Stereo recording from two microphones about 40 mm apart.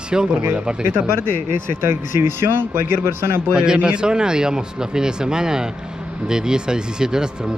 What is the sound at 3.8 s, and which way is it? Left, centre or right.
Speech, right.